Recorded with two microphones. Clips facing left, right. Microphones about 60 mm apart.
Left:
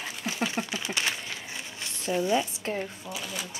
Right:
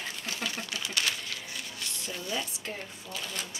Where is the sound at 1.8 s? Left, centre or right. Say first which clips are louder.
Left 13 dB; left.